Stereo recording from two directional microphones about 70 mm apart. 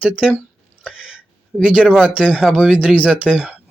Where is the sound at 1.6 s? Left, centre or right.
Centre.